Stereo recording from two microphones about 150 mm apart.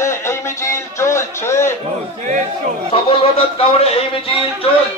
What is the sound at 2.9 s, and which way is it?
Speech, 40° left (ahead or behind).